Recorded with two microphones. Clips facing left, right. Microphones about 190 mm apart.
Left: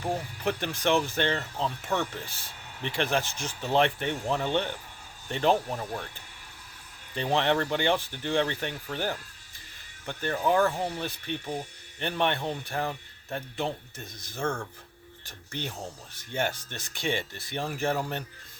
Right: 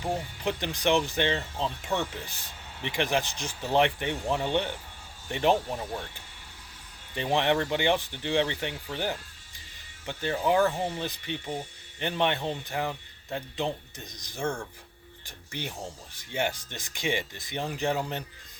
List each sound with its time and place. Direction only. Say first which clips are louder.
0.0 s speech: left 1 dB; 15° right (ahead or behind)
7.1 s speech: even; 15° right (ahead or behind)
10.1 s speech: even; 15° right (ahead or behind)